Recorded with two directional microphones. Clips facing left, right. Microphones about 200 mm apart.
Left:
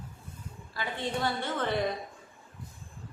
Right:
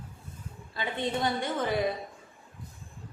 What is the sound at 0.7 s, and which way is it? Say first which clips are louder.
A woman's voice: right 2 dB; 20° right (ahead or behind).